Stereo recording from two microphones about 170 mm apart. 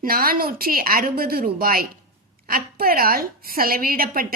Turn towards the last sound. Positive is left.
turn(degrees=-60)  # may be behind; listen again after turning